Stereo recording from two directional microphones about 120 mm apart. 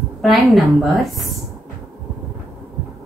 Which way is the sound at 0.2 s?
Centre (ahead or behind).